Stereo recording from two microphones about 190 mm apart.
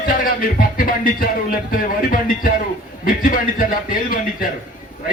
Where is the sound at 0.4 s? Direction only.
50° left (ahead or behind).